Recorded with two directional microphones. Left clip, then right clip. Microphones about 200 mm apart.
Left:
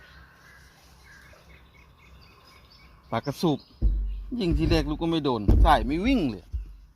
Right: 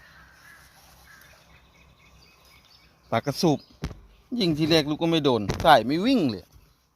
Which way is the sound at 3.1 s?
20° right (ahead or behind).